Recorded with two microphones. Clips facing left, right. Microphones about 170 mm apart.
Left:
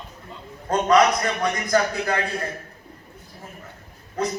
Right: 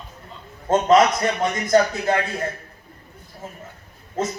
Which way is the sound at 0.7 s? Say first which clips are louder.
Right 2 dB; 25° right (ahead or behind).